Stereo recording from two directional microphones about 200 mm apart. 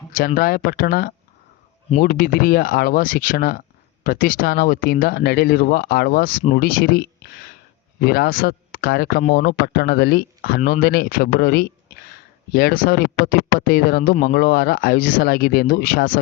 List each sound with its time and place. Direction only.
0.1 s speech: 45° left (ahead or behind)